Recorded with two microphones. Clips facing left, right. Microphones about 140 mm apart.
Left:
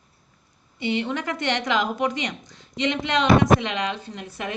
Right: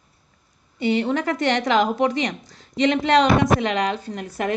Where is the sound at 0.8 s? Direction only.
40° right (ahead or behind).